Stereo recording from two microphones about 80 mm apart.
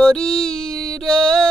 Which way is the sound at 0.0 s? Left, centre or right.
Centre.